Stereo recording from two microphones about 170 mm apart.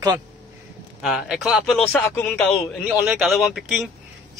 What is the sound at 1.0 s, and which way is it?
A man's voice, centre (ahead or behind).